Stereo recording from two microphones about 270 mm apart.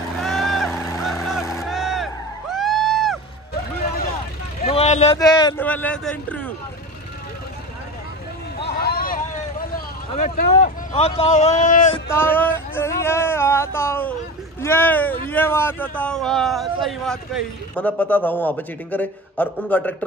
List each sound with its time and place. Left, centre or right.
0.2 s boat: centre
1.5 s a sound: centre
4.6 s speech: left; by 6.5 s centre
8.6 s vehicle: left
10.1 s speech: left
12.1 s a sound: centre
14.6 s a man's voice: centre